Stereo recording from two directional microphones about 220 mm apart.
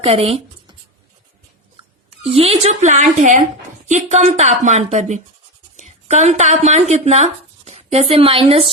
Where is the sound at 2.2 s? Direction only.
25° right (ahead or behind).